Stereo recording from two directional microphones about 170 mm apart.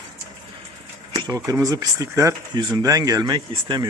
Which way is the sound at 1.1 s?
25° right (ahead or behind).